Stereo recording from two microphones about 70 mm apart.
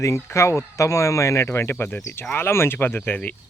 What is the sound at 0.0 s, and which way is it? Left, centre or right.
Speech, left.